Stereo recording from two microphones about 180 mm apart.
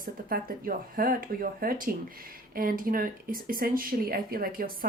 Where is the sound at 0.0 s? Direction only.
55° right (ahead or behind).